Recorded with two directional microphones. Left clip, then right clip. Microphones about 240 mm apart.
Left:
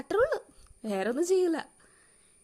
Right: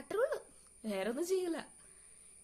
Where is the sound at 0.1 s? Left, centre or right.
Left.